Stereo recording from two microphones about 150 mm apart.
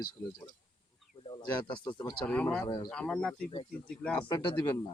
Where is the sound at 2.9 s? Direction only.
5° left (ahead or behind).